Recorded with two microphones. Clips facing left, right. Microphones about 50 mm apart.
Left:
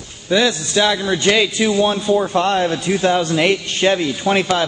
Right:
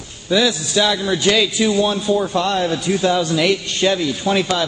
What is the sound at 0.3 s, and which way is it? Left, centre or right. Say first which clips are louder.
Speech: left 1 dB; centre.